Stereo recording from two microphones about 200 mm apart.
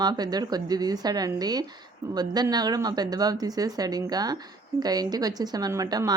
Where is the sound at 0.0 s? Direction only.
20° right (ahead or behind).